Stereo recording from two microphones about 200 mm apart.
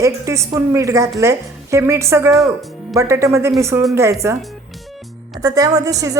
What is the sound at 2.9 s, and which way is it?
A woman's voice, 15° right (ahead or behind).